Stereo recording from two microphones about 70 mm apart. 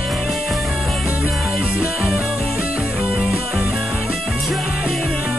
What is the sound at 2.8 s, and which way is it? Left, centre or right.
Music, centre.